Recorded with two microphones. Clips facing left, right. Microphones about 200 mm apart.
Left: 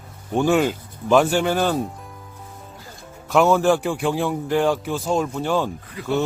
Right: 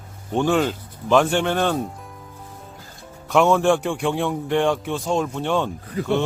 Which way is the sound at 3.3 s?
Centre (ahead or behind).